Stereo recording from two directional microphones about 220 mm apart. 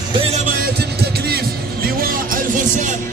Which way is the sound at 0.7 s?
45° right (ahead or behind).